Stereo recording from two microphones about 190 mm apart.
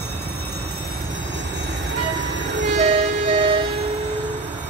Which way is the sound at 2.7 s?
35° right (ahead or behind).